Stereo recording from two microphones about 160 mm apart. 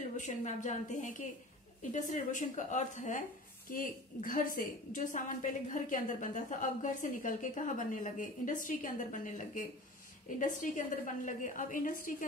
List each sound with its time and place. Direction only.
0.2 s a woman's voice: 50° left (ahead or behind)